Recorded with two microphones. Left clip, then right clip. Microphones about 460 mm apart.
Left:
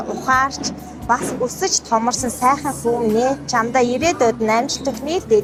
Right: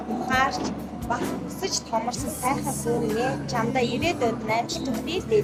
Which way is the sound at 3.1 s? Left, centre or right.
Left.